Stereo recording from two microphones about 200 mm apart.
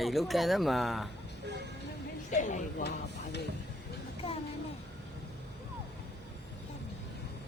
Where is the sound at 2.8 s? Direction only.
60° left (ahead or behind).